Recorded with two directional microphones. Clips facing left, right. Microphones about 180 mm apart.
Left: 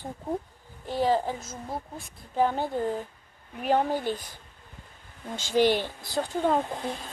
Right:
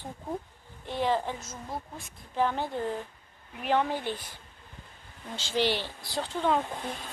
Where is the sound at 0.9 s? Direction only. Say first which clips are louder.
Left 3 dB; 40° left (ahead or behind).